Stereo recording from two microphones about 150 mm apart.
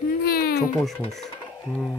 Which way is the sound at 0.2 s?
90° left.